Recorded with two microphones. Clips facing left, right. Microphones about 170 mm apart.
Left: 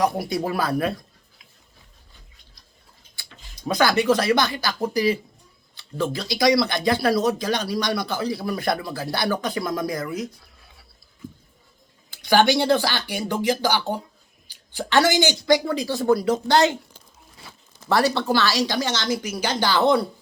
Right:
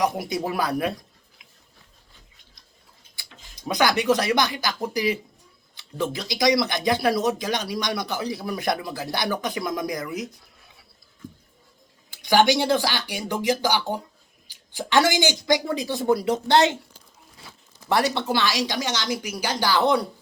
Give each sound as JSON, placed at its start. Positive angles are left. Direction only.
{"t": 0.3, "sound": "speech", "side_deg": -20}
{"t": 3.2, "sound": "speech", "side_deg": -20}
{"t": 12.1, "sound": "speech", "side_deg": -15}
{"t": 18.1, "sound": "speech", "side_deg": -20}